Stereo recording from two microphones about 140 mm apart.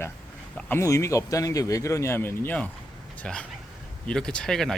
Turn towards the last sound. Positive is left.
turn(degrees=5)  # may be behind; listen again after turning